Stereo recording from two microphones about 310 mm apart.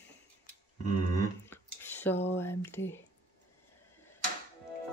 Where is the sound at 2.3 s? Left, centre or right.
Centre.